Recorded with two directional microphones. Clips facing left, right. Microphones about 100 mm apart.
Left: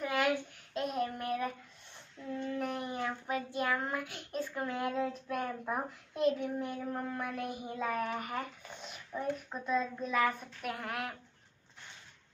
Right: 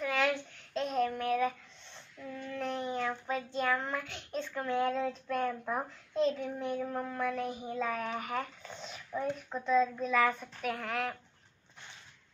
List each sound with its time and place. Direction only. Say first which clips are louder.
0.0 s a sound: even; 5° left (ahead or behind)
2.5 s child singing: right 4 dB; 10° left (ahead or behind)
8.2 s speech: right 2 dB; centre (ahead or behind)